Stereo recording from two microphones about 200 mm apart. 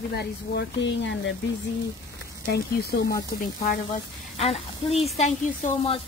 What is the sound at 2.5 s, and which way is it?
Speech, 55° left (ahead or behind).